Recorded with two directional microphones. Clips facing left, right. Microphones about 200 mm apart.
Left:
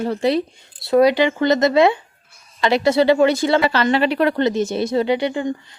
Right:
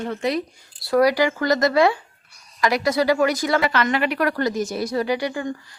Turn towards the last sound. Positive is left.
turn(degrees=20)  # may be behind; listen again after turning